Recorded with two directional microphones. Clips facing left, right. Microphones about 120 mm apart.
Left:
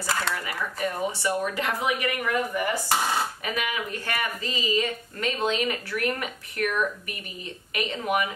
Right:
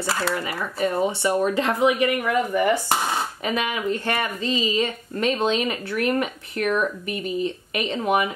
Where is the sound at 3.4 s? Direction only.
25° right (ahead or behind).